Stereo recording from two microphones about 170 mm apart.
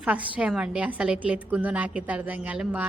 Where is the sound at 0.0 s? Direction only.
5° right (ahead or behind).